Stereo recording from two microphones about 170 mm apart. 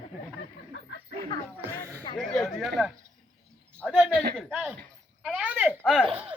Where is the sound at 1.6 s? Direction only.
15° right (ahead or behind).